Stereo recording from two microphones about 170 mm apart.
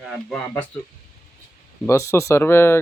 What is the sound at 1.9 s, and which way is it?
Speech, 15° left (ahead or behind).